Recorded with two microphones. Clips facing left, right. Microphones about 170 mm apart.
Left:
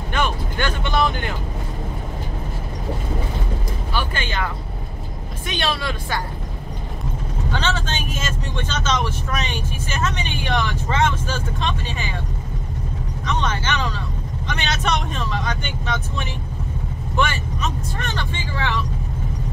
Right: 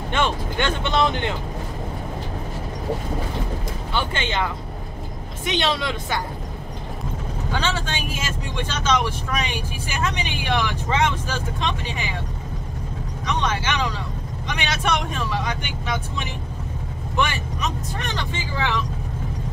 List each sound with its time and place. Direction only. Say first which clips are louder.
0.1 s speech: even; 25° right (ahead or behind)
3.9 s speech: right 1 dB; 25° right (ahead or behind)
7.5 s speech: left 1 dB; 10° right (ahead or behind)
13.2 s speech: even; 15° right (ahead or behind)